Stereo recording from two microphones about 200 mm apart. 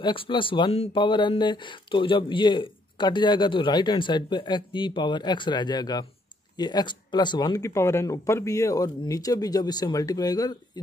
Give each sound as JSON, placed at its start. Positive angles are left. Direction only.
{"t": 0.0, "sound": "speech", "side_deg": 25}